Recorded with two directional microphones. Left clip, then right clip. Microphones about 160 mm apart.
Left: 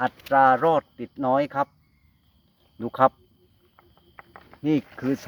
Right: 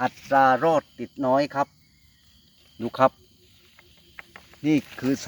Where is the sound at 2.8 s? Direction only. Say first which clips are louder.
Even; 10° right (ahead or behind).